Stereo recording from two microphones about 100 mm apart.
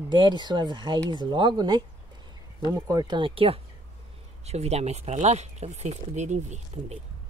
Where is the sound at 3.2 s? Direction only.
70° right (ahead or behind).